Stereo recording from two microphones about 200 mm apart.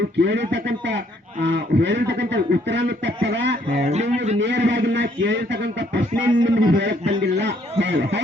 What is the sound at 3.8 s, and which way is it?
Speech, 35° right (ahead or behind).